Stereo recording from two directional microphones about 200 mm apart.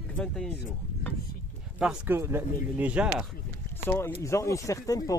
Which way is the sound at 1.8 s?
10° right (ahead or behind).